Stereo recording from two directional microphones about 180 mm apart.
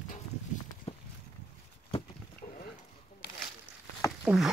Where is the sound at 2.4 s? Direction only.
35° left (ahead or behind).